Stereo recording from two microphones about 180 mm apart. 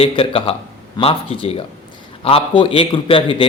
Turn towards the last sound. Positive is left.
turn(degrees=30)  # may be behind; listen again after turning